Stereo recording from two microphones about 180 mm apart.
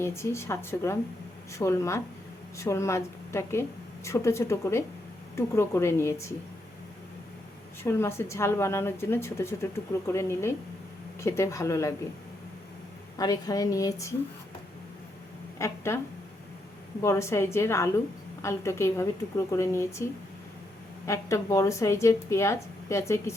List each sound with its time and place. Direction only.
0.0 s a woman's voice: 15° left (ahead or behind)
7.9 s a woman's voice: 15° left (ahead or behind)
13.1 s a woman's voice: 20° left (ahead or behind)
15.5 s a woman's voice: 15° left (ahead or behind)
17.0 s a woman's voice: 15° left (ahead or behind)
21.1 s a woman's voice: 15° left (ahead or behind)